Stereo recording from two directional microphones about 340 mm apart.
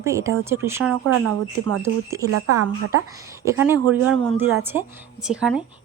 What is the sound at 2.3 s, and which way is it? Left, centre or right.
Speech, right.